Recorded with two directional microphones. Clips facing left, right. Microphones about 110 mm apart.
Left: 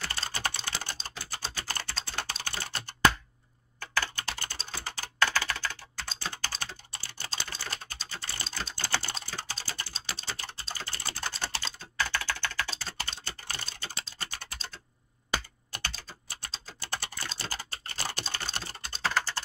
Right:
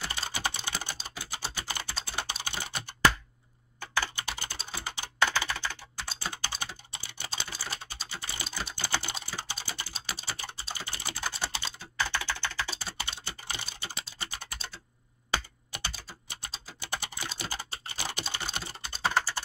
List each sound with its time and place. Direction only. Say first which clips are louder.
0.0 s typing: even; 15° right (ahead or behind)
15.7 s typing: even; 15° right (ahead or behind)